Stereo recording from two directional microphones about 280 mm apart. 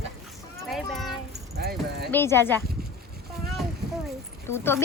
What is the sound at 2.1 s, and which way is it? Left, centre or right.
Speech, centre.